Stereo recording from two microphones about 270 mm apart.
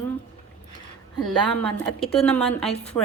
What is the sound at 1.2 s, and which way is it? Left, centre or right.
A woman's voice, centre.